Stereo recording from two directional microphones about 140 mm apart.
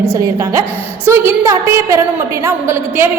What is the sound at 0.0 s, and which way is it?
A woman's voice, 20° right (ahead or behind).